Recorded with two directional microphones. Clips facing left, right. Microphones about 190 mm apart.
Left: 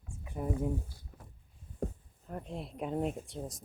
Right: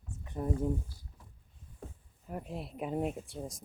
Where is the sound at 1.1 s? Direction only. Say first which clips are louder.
Left 5 dB; 75° left (ahead or behind).